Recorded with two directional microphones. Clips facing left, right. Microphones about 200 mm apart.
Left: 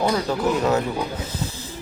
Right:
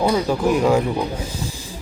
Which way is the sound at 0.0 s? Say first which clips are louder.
Right 3 dB; 10° right (ahead or behind).